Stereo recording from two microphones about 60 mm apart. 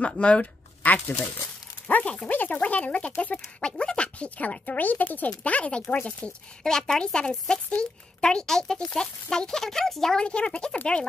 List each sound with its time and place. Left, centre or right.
0.0 s speech: centre